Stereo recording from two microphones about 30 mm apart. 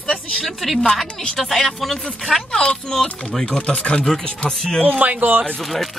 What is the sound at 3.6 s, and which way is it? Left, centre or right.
Speech, left.